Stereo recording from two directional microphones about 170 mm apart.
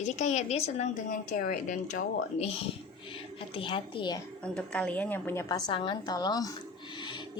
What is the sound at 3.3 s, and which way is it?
Speech, 30° left (ahead or behind).